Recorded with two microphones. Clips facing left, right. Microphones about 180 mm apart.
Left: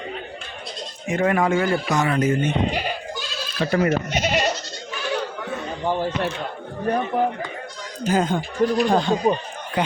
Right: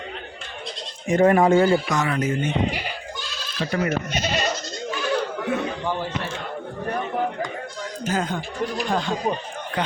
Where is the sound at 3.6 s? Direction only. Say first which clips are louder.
Left 4 dB; 55° left (ahead or behind).